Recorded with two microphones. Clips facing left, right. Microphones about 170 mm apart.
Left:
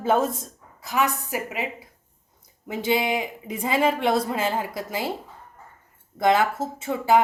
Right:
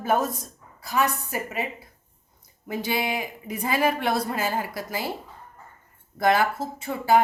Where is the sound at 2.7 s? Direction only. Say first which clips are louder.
Left 3 dB; 20° left (ahead or behind).